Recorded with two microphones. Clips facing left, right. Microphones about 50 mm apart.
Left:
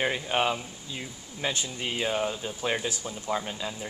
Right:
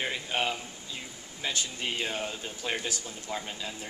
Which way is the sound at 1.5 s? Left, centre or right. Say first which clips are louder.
Left 1 dB; left.